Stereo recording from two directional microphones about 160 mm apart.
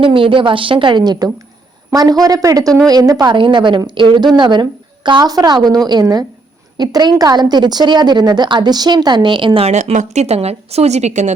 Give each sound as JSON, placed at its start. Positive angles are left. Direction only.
{"t": 0.0, "sound": "a woman's voice", "side_deg": -35}